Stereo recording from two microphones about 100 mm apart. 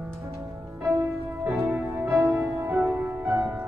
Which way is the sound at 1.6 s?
30° right (ahead or behind).